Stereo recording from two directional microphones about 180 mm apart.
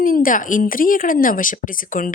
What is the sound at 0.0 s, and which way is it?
Speech, 50° left (ahead or behind).